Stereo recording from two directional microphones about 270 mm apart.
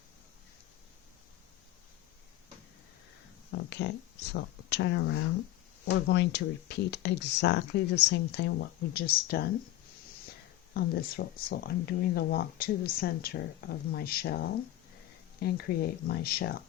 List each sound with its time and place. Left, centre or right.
3.5 s a sound: left
4.3 s speech: left
10.8 s speech: left